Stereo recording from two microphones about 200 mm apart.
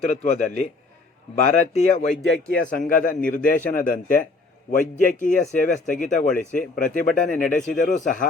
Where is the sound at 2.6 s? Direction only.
40° left (ahead or behind).